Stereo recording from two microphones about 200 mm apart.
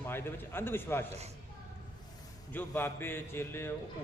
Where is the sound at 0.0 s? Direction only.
10° left (ahead or behind).